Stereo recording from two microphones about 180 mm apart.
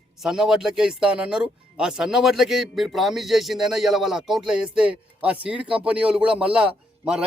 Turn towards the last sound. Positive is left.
turn(degrees=-5)  # may be behind; listen again after turning